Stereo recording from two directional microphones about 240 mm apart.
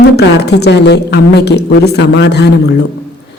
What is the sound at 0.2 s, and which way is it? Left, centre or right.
A man's voice, left.